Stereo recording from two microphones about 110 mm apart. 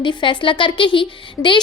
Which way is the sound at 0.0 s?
45° left (ahead or behind).